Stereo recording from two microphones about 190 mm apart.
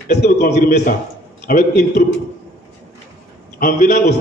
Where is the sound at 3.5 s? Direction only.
55° left (ahead or behind).